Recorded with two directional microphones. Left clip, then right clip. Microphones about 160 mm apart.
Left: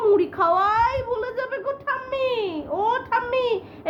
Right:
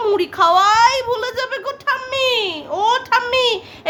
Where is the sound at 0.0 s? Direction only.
20° right (ahead or behind).